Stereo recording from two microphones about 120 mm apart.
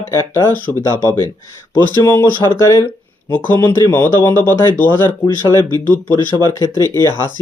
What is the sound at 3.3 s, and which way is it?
Speech, 15° left (ahead or behind).